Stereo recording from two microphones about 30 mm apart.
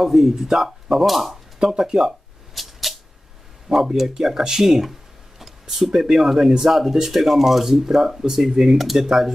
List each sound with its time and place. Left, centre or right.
0.0 s speech: centre
1.7 s speech: centre
2.5 s a sound: centre
3.7 s speech: centre
5.4 s a sound: centre
5.9 s speech: centre
8.7 s speech: centre